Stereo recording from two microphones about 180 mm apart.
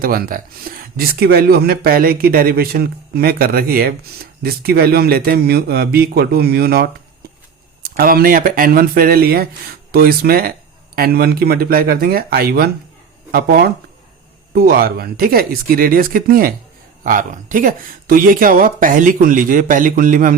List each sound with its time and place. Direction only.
0.0 s speech: 55° right (ahead or behind)